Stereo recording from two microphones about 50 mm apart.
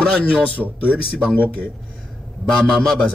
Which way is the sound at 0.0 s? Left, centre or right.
Left.